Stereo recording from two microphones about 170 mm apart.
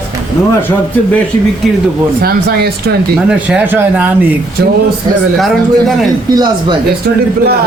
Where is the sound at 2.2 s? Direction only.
65° right (ahead or behind).